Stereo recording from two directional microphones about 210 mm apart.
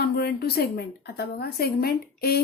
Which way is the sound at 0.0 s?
50° left (ahead or behind).